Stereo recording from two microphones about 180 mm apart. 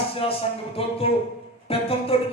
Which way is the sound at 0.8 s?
30° left (ahead or behind).